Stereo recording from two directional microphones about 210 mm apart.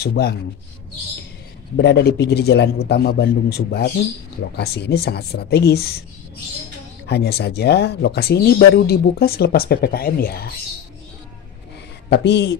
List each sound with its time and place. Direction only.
0.0 s speech: 50° left (ahead or behind)
1.8 s speech: 55° left (ahead or behind)
7.1 s speech: 50° left (ahead or behind)
12.1 s speech: 55° left (ahead or behind)